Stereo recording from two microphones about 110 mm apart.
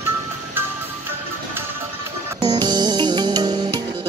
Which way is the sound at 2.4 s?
40° right (ahead or behind).